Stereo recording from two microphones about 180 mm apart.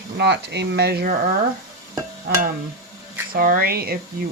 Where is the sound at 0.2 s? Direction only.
65° right (ahead or behind).